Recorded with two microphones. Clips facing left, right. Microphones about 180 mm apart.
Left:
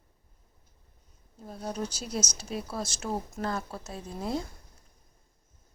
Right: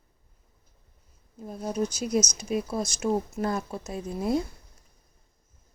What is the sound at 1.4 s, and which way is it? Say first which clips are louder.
Speech: right 4 dB; 5° right (ahead or behind).